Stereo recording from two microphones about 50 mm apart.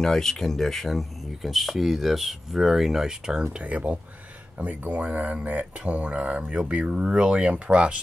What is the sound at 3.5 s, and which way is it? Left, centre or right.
Speech, right.